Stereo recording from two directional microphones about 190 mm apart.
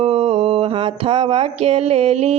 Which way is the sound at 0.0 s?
30° right (ahead or behind).